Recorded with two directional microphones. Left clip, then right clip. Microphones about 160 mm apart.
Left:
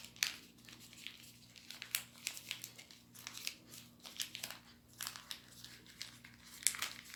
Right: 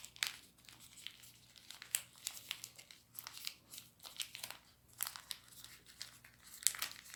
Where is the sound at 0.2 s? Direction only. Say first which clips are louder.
Left 2 dB; 20° right (ahead or behind).